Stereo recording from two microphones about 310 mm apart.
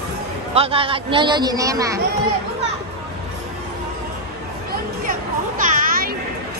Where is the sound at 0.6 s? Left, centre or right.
Centre.